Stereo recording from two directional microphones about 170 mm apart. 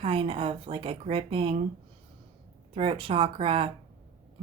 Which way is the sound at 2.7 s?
30° right (ahead or behind).